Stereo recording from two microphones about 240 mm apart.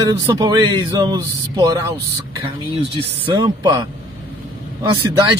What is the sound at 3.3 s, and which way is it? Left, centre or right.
Speech, centre.